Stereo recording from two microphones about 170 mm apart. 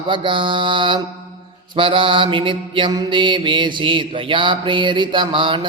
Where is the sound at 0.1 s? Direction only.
30° right (ahead or behind).